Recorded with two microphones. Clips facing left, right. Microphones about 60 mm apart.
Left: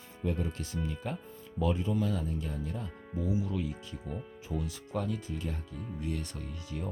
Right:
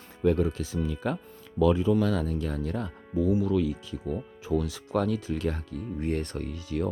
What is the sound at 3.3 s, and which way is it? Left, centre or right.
Speech, right.